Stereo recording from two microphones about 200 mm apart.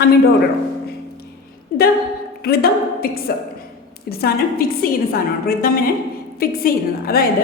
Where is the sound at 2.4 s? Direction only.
50° left (ahead or behind).